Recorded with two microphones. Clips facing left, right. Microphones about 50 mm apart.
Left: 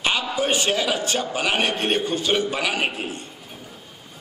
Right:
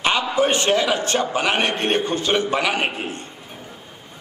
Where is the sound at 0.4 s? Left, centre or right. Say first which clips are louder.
Right 4 dB; right.